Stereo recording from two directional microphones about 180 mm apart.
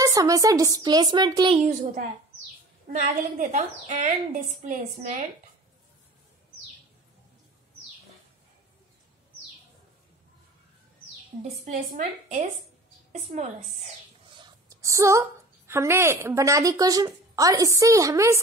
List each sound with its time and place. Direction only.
0.0 s speech: 20° right (ahead or behind)
1.7 s a woman's voice: 45° right (ahead or behind)
11.4 s a woman's voice: 40° right (ahead or behind); by 18.4 s 15° right (ahead or behind)